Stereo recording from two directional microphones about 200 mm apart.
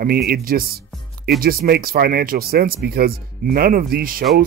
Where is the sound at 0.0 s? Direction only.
50° right (ahead or behind).